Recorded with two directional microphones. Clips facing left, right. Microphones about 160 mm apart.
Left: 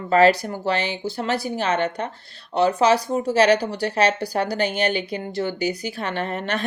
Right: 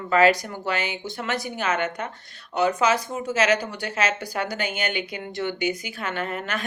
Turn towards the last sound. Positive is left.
turn(degrees=35)  # may be behind; listen again after turning